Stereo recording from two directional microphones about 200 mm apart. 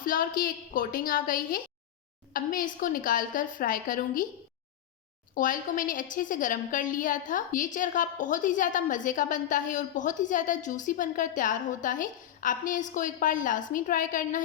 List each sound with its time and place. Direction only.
0.0 s a woman's voice: 45° left (ahead or behind)
5.3 s a woman's voice: 40° left (ahead or behind)